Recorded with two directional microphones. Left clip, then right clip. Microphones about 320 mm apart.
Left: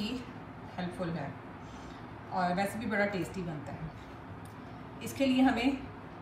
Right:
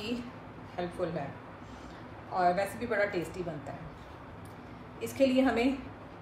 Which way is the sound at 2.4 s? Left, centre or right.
Centre.